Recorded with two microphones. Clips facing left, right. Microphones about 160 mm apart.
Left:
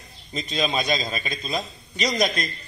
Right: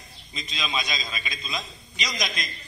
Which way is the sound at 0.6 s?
55° left (ahead or behind).